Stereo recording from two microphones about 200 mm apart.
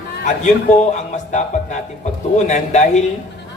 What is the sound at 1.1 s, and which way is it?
A man's voice, 35° left (ahead or behind).